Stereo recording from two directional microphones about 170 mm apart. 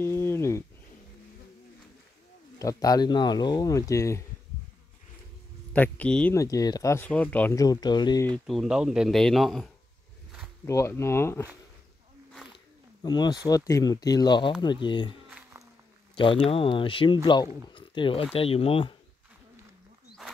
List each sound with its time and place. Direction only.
0.0 s a sound: 15° left (ahead or behind)
2.6 s speech: 20° left (ahead or behind)
5.7 s speech: 10° left (ahead or behind)
6.3 s speech: 20° left (ahead or behind)
7.6 s speech: 25° left (ahead or behind)
8.5 s speech: centre (ahead or behind)
10.6 s speech: 15° left (ahead or behind)
12.5 s speech: 25° left (ahead or behind)
16.4 s speech: 30° left (ahead or behind)